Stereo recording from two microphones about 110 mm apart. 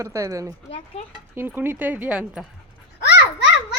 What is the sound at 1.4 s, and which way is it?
Speech, 20° right (ahead or behind).